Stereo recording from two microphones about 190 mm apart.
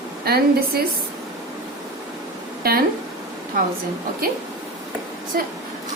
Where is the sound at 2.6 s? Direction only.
50° right (ahead or behind).